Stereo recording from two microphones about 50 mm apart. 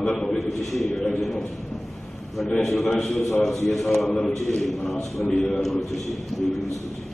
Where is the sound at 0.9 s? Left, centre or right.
Centre.